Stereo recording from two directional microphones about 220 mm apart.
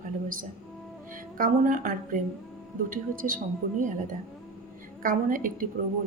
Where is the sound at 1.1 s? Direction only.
40° right (ahead or behind).